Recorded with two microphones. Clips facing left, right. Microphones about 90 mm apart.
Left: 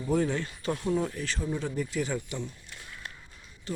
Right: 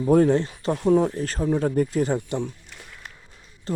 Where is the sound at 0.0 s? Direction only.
50° right (ahead or behind).